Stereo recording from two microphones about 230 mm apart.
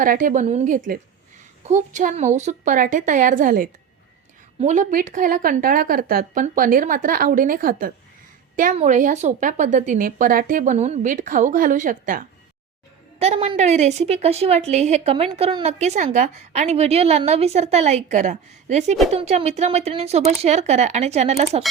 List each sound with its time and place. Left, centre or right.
0.0 s a woman's voice: right